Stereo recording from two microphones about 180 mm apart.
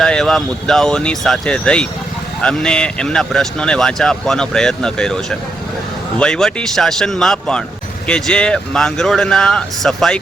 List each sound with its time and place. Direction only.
0.0 s speech: 5° left (ahead or behind)